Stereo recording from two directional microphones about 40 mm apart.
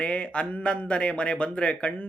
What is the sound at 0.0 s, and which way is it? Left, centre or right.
Speech, left.